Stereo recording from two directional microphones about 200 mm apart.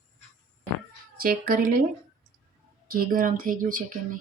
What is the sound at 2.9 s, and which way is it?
Speech, 45° right (ahead or behind).